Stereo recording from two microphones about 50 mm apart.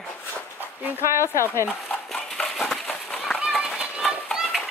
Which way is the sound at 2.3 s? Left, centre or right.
Centre.